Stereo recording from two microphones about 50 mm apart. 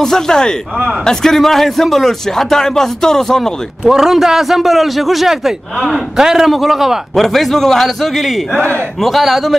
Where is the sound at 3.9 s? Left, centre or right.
Centre.